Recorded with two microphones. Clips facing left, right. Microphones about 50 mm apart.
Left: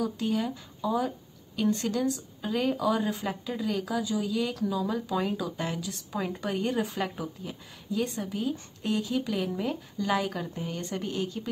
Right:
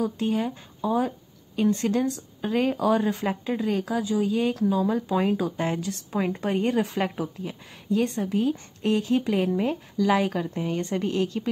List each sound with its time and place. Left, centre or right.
0.0 s speech: right
3.0 s speech: right
3.3 s speech: right